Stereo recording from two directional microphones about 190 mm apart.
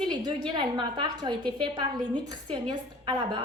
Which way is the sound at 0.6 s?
25° right (ahead or behind).